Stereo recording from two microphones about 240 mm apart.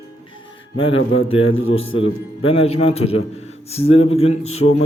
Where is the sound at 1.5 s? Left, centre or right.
Left.